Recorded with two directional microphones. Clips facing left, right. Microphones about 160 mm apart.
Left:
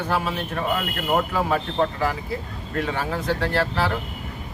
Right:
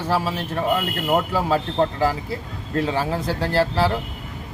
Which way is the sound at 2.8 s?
30° right (ahead or behind).